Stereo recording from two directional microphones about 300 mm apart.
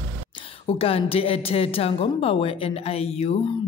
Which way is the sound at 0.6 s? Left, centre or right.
Centre.